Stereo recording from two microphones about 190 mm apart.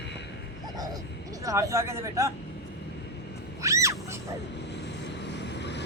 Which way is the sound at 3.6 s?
15° right (ahead or behind).